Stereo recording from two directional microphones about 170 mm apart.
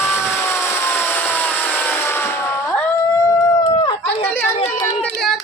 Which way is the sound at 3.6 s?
30° left (ahead or behind).